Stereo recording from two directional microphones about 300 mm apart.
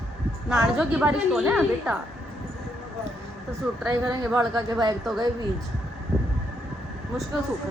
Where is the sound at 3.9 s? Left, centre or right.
Centre.